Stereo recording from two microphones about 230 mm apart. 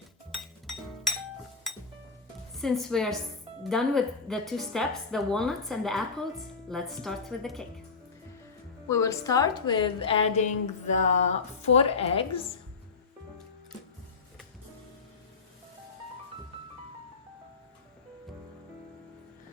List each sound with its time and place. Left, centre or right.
1.7 s music: centre
2.6 s a woman's voice: centre
8.9 s a woman's voice: centre